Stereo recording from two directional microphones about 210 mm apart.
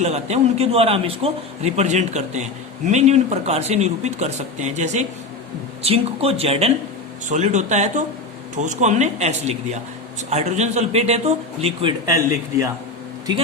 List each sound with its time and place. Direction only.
0.0 s a man's voice: 30° right (ahead or behind); by 12.7 s 15° right (ahead or behind)